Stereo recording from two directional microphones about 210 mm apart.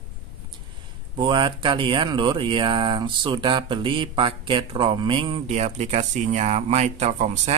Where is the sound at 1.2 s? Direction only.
20° right (ahead or behind).